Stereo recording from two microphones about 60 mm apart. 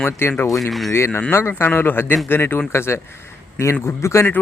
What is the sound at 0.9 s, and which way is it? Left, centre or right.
Speech, left.